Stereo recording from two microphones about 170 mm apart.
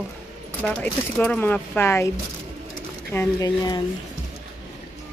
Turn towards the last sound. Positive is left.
turn(degrees=20)  # may be behind; listen again after turning